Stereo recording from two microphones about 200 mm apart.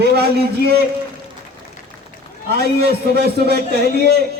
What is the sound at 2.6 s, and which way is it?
A man's voice, 55° right (ahead or behind).